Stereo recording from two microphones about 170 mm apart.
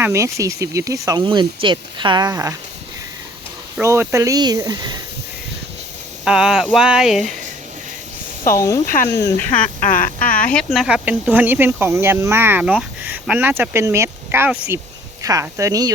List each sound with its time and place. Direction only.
0.0 s speech: 15° right (ahead or behind)
3.8 s speech: 15° right (ahead or behind)
6.2 s speech: 5° right (ahead or behind)
8.5 s speech: 15° left (ahead or behind)
9.8 s a sound: 55° left (ahead or behind)
10.5 s speech: centre (ahead or behind); by 15.9 s 20° right (ahead or behind)